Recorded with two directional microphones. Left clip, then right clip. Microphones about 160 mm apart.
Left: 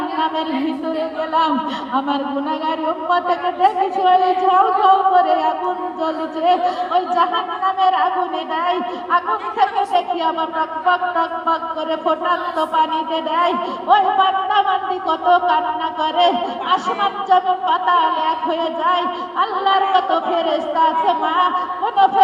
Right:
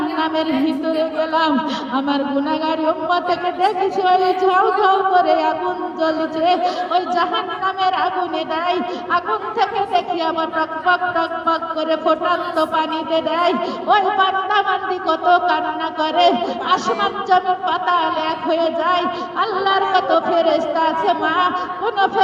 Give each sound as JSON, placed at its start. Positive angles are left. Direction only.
{"t": 0.9, "sound": "speech", "side_deg": -30}